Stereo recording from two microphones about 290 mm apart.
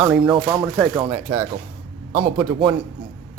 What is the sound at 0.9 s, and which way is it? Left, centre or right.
Speech, centre.